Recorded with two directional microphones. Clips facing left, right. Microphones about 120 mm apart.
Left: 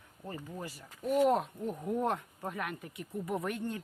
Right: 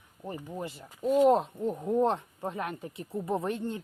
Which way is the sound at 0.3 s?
20° right (ahead or behind).